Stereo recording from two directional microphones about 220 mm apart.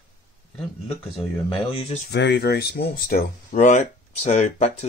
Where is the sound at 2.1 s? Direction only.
50° left (ahead or behind).